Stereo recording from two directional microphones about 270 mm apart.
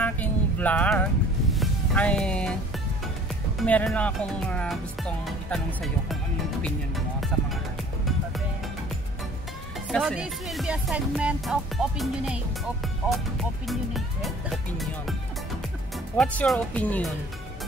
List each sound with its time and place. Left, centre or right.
0.0 s music: centre
3.5 s speech: centre
7.3 s speech: centre
9.8 s speech: centre
16.2 s speech: centre